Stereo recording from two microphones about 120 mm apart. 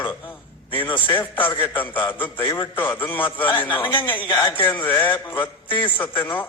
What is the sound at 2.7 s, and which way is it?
Speech, 15° left (ahead or behind).